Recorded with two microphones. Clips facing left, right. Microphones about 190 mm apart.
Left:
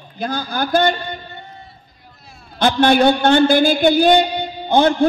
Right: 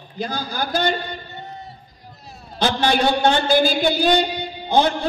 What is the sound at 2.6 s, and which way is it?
A man's voice, 55° left (ahead or behind).